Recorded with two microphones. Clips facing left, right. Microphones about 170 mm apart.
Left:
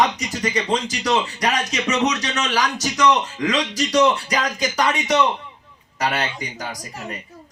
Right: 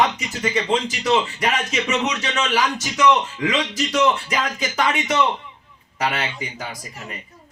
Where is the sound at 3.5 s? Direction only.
35° left (ahead or behind).